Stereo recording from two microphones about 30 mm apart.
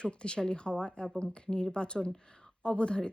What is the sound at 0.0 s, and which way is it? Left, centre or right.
Speech, left.